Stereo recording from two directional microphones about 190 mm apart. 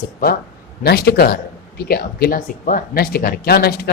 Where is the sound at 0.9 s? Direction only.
55° left (ahead or behind).